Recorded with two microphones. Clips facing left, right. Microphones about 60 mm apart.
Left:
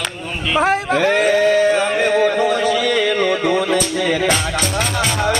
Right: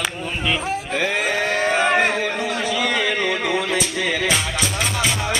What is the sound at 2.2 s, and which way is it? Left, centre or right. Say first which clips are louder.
Music: left 8 dB; left.